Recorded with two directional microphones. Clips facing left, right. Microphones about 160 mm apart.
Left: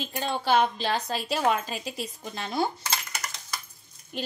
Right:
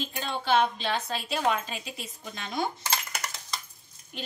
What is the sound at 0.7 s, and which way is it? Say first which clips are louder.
A woman's voice: left 2 dB; 40° left (ahead or behind).